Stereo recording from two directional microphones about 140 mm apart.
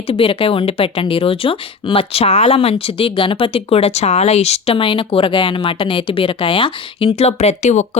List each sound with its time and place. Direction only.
0.1 s speech: 40° left (ahead or behind)
7.2 s speech: 50° left (ahead or behind)